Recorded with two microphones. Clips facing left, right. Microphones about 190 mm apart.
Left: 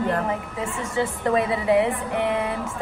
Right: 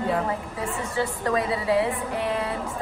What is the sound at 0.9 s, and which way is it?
A woman's voice, 25° left (ahead or behind).